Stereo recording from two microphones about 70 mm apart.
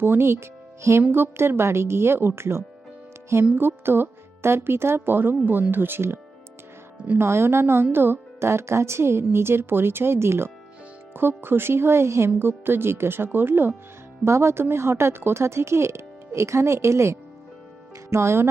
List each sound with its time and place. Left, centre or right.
0.0 s speech: right
7.2 s speech: right